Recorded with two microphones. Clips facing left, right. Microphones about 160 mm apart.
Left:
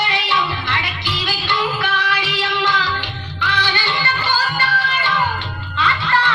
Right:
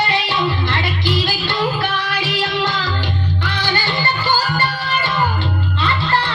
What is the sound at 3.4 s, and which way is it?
Music, 45° right (ahead or behind).